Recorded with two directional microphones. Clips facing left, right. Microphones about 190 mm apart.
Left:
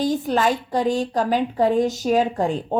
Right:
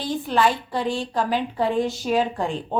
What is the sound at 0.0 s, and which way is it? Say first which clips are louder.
A woman's voice: left 2 dB; 45° left (ahead or behind).